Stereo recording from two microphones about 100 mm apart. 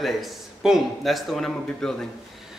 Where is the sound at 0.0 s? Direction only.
Centre (ahead or behind).